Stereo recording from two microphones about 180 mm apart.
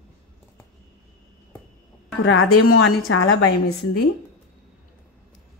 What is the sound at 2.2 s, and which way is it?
Speech, 90° left.